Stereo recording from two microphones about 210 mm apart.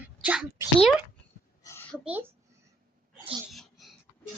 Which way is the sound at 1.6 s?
10° left (ahead or behind).